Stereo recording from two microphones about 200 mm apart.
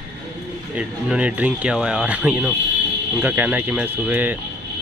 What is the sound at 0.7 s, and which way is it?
Speech, 5° right (ahead or behind).